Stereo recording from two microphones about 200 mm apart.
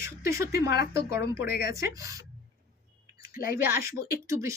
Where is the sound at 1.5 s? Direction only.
50° left (ahead or behind).